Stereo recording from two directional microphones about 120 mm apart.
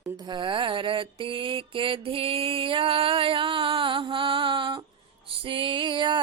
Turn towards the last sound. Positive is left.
turn(degrees=-45)  # may be behind; listen again after turning